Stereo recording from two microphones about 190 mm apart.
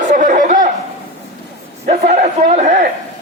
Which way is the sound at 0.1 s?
45° right (ahead or behind).